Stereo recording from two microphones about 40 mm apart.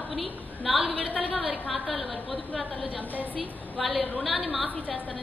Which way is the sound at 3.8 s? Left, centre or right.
Centre.